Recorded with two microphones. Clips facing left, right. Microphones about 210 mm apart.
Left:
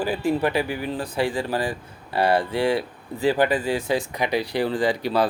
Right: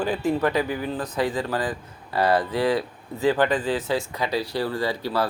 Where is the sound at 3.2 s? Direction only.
10° left (ahead or behind).